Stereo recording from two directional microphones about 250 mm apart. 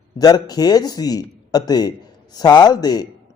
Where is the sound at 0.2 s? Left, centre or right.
Centre.